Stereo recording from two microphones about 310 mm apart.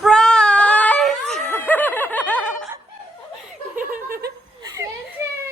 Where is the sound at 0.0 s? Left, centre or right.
Centre.